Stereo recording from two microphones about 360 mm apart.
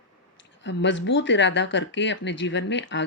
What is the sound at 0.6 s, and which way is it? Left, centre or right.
Speech, left.